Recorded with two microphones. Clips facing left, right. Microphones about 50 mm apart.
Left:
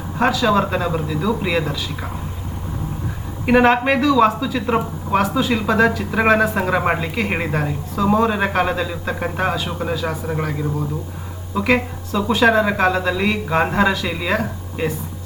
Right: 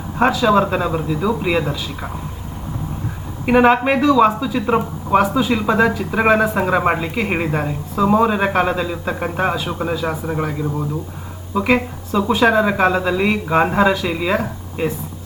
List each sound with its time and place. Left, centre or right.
0.2 s speech: centre
0.4 s speech: centre
3.4 s speech: centre
11.5 s speech: centre